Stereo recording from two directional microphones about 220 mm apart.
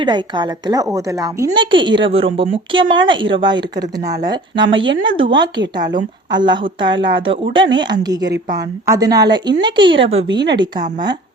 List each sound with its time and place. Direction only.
0.0 s a woman's voice: 20° right (ahead or behind)